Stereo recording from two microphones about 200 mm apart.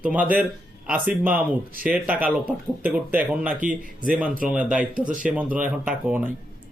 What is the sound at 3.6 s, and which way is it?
Speech, 40° right (ahead or behind).